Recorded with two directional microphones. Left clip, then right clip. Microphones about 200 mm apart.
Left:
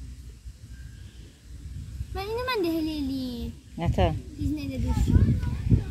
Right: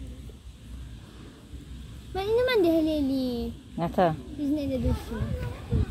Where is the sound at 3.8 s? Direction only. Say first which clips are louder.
Right 3 dB; 20° left (ahead or behind).